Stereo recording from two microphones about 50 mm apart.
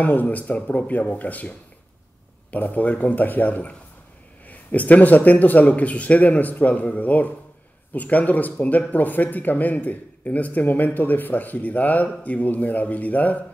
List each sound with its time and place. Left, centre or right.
0.0 s speech: left